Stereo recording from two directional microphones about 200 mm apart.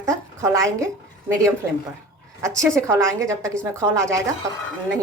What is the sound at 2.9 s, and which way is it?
Speech, 15° right (ahead or behind).